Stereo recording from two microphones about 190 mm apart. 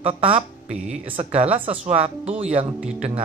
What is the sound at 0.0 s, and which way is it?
A man's voice, 30° right (ahead or behind).